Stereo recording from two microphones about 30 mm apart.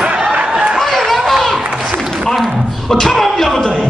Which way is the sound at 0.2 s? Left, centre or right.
Right.